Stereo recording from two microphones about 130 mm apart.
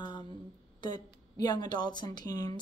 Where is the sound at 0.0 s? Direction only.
35° left (ahead or behind).